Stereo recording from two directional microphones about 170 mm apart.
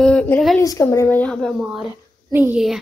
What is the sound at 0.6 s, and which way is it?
Speech, 20° left (ahead or behind).